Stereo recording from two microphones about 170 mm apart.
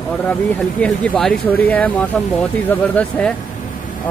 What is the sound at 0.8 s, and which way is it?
Speech, 5° left (ahead or behind).